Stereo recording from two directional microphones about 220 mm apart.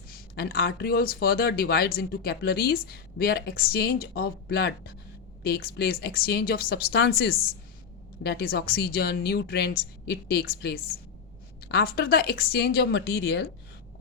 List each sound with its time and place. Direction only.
0.1 s speech: 45° left (ahead or behind)